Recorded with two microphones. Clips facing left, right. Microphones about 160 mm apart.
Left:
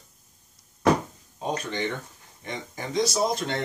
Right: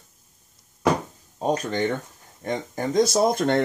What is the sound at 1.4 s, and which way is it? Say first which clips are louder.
Speech: right 5 dB; 45° right (ahead or behind).